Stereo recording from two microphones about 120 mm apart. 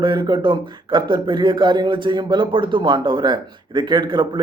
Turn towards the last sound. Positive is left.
turn(degrees=-40)  # may be behind; listen again after turning